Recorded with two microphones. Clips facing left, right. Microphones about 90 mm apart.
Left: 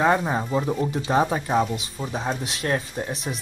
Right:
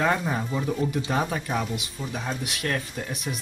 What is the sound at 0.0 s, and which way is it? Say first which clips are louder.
Speech: left 4 dB; 25° left (ahead or behind).